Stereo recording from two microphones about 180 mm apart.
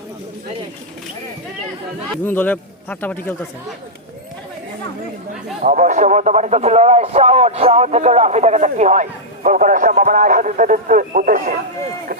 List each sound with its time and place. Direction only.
2.2 s speech: 10° left (ahead or behind)
5.6 s speech: 45° right (ahead or behind)